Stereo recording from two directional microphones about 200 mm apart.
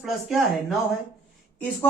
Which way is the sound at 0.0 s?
Centre (ahead or behind).